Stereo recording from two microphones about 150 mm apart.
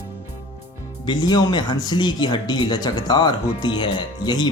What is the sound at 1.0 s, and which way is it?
Speech, 30° left (ahead or behind).